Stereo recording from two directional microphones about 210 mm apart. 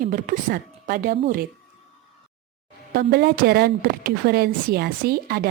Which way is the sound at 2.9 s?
50° right (ahead or behind).